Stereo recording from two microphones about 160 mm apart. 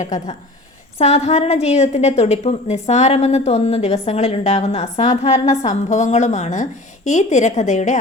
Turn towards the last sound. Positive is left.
turn(degrees=50)  # may be behind; listen again after turning